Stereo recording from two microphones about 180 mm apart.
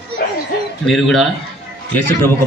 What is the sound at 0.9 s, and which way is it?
Speech, centre (ahead or behind).